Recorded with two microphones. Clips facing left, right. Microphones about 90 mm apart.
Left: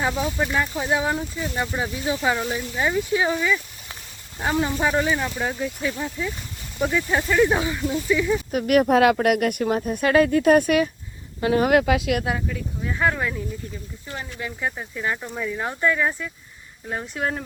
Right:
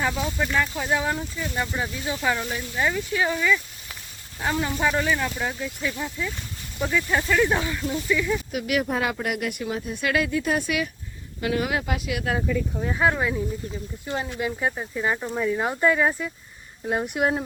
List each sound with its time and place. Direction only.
0.0 s speech: 15° left (ahead or behind)
8.5 s speech: 45° left (ahead or behind)
8.9 s speech: 70° left (ahead or behind); by 10.8 s 50° left (ahead or behind)
11.3 s speech: 35° left (ahead or behind)
11.7 s speech: 90° left
13.0 s speech: 10° right (ahead or behind)